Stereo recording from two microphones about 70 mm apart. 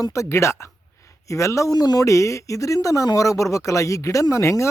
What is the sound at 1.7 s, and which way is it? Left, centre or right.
Speech, left.